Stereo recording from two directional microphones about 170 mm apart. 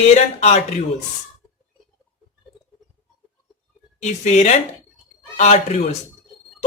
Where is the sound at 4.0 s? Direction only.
45° left (ahead or behind).